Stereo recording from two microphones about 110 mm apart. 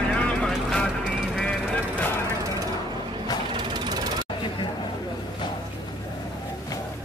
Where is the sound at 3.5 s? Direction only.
40° right (ahead or behind).